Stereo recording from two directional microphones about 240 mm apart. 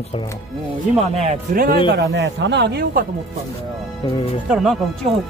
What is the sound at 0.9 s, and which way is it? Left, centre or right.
Speech, right.